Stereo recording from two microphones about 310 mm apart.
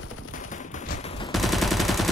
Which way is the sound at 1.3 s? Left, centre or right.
Centre.